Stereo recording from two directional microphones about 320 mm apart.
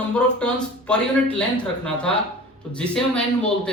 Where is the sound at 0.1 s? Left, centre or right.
Centre.